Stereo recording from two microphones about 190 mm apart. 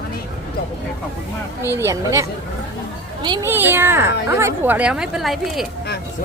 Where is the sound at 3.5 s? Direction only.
10° right (ahead or behind).